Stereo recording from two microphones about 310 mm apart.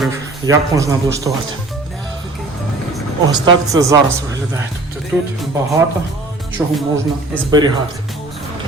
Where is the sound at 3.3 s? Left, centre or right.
Centre.